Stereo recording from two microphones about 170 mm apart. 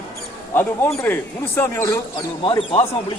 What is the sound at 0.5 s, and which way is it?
A man's voice, 10° left (ahead or behind).